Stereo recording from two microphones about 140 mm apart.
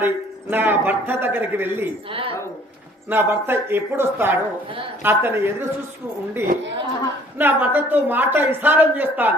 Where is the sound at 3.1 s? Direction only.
15° right (ahead or behind).